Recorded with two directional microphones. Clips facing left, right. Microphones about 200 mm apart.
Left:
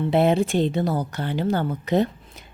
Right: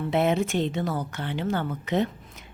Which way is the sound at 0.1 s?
30° left (ahead or behind).